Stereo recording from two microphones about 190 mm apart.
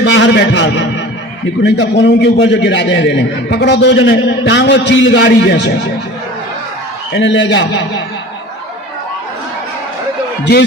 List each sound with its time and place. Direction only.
0.0 s a man's voice: 70° left (ahead or behind)
7.1 s a man's voice: 70° left (ahead or behind)